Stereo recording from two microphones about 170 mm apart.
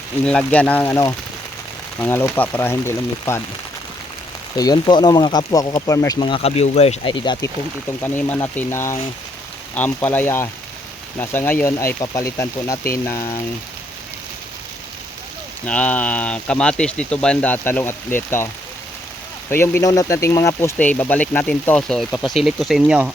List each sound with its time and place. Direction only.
0.3 s speech: 5° left (ahead or behind)
4.5 s speech: 25° left (ahead or behind)
8.0 s speech: 10° left (ahead or behind)
15.6 s speech: 10° left (ahead or behind)
19.5 s speech: 15° left (ahead or behind); by 23.1 s 5° right (ahead or behind)